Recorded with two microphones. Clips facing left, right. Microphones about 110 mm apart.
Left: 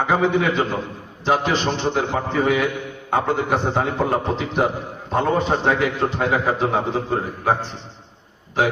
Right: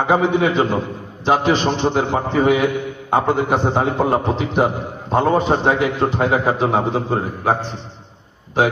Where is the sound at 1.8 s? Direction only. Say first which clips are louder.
Right 3 dB; 30° right (ahead or behind).